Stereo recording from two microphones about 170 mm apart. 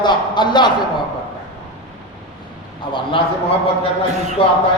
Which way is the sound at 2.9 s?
30° left (ahead or behind).